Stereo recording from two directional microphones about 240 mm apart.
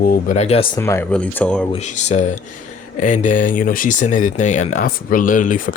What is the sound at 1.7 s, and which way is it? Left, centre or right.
Speech, left.